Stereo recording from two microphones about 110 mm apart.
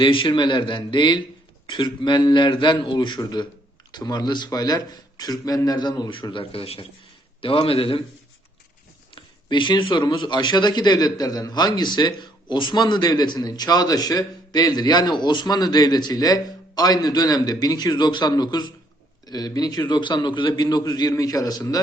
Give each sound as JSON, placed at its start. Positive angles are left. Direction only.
{"t": 0.0, "sound": "a man's voice", "side_deg": 50}
{"t": 9.1, "sound": "speech", "side_deg": 45}
{"t": 19.9, "sound": "a man's voice", "side_deg": 45}